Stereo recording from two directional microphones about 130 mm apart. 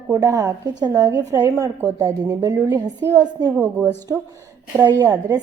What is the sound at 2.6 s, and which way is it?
Speech, 30° right (ahead or behind).